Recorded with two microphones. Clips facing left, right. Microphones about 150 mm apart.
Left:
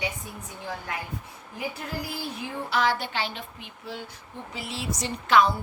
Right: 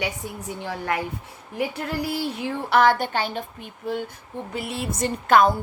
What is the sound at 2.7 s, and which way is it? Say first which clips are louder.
A woman's voice: right 7 dB; 55° right (ahead or behind).